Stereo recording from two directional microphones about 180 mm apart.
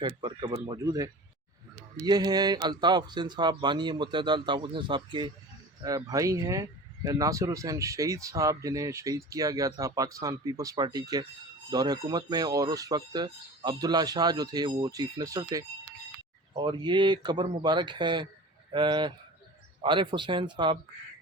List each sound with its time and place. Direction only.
0.0 s speech: 25° right (ahead or behind)